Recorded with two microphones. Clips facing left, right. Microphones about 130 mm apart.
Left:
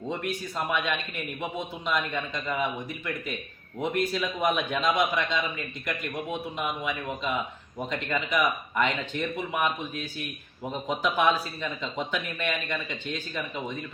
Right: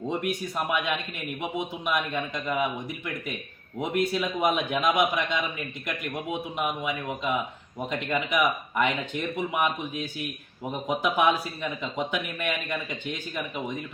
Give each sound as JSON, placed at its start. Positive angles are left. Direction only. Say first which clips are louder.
{"t": 0.1, "sound": "speech", "louder": "right 2 dB", "side_deg": -15}
{"t": 3.8, "sound": "speech", "louder": "right 1 dB", "side_deg": -20}